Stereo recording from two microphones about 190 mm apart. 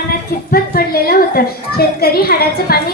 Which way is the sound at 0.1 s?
50° left (ahead or behind).